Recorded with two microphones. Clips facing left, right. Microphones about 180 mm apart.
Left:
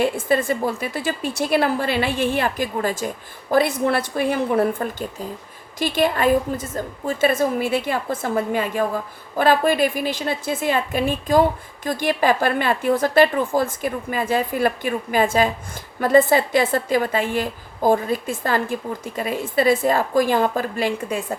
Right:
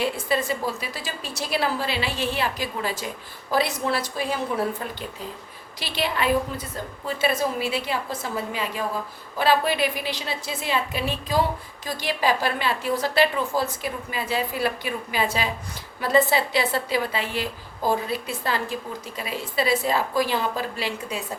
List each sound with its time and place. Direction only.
0.0 s a woman's voice: 50° left (ahead or behind)